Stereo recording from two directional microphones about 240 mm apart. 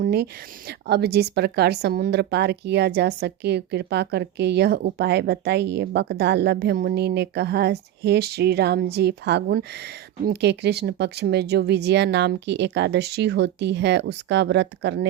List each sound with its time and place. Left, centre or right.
0.0 s a woman's voice: right